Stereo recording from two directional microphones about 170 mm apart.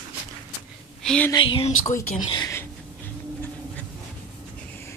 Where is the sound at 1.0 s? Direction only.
5° left (ahead or behind).